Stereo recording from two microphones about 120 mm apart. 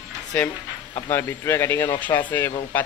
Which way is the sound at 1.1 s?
20° left (ahead or behind).